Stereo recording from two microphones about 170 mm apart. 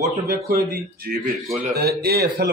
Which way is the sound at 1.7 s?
65° right (ahead or behind).